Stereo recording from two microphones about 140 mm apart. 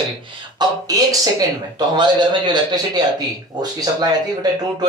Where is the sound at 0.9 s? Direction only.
25° right (ahead or behind).